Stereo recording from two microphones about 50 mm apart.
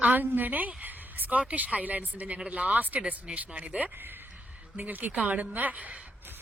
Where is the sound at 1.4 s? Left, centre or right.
Right.